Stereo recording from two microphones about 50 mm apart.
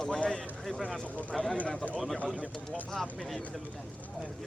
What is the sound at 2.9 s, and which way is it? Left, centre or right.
Speech, centre.